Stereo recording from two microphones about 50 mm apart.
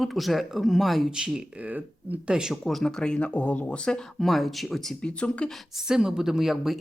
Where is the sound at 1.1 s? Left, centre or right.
Centre.